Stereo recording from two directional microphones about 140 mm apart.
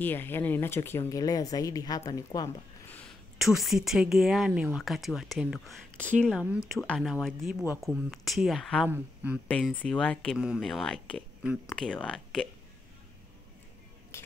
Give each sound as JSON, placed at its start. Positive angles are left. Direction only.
{"t": 0.0, "sound": "speech", "side_deg": 15}
{"t": 3.3, "sound": "speech", "side_deg": 0}
{"t": 8.8, "sound": "speech", "side_deg": -10}
{"t": 9.5, "sound": "speech", "side_deg": 10}
{"t": 14.1, "sound": "music", "side_deg": 20}